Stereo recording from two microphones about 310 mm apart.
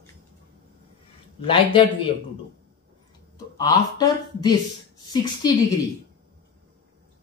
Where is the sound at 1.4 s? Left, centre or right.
Centre.